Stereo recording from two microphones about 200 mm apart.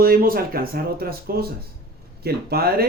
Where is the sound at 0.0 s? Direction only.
45° right (ahead or behind).